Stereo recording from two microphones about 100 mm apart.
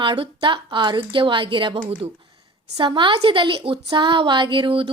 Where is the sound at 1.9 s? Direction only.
80° right.